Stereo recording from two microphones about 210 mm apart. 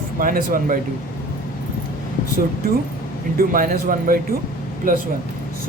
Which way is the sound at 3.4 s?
45° right (ahead or behind).